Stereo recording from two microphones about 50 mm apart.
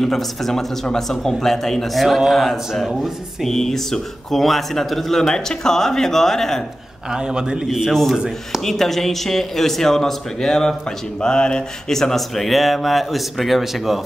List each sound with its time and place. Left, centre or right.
0.0 s a man's voice: centre
7.1 s a man's voice: centre
7.6 s a man's voice: centre